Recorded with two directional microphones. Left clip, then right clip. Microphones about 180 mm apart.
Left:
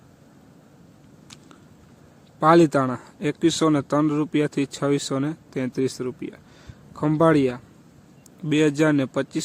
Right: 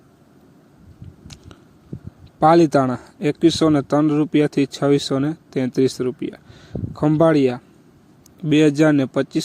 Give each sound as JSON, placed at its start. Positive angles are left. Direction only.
{"t": 2.4, "sound": "speech", "side_deg": -20}